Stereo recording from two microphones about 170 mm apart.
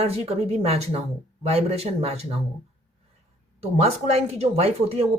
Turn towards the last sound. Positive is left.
turn(degrees=-35)  # may be behind; listen again after turning